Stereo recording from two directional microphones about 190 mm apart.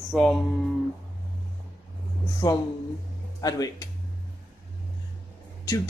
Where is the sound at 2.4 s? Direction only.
20° left (ahead or behind).